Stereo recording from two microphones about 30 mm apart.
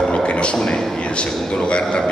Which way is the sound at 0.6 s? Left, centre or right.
Left.